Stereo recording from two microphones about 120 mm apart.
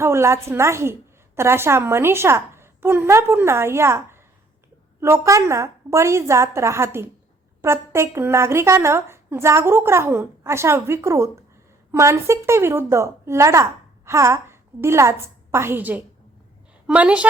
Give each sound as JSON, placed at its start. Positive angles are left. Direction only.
{"t": 0.0, "sound": "a woman's voice", "side_deg": -20}